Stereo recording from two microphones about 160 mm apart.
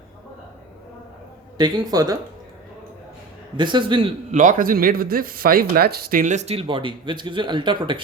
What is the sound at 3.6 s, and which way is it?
Speech, 30° right (ahead or behind).